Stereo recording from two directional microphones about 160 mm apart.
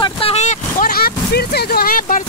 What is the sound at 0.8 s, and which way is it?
Speech, 70° left (ahead or behind).